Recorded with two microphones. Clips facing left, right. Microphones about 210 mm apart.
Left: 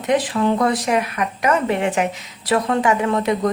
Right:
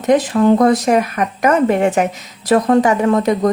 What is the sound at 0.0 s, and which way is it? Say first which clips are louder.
A woman's voice: right 6 dB; 45° right (ahead or behind).